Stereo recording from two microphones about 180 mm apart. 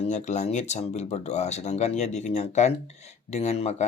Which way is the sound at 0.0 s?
40° left (ahead or behind).